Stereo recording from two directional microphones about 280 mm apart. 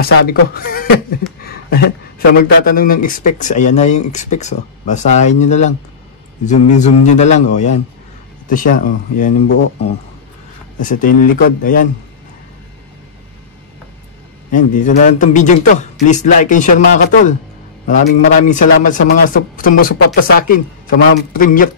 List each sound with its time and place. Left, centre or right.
0.3 s speech: left
14.5 s speech: left